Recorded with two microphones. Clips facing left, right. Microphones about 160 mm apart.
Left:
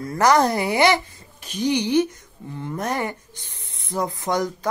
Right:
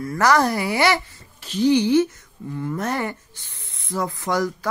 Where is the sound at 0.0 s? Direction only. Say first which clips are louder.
Left 1 dB; 20° left (ahead or behind).